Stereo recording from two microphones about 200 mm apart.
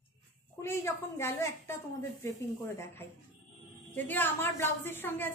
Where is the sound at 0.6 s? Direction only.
10° left (ahead or behind).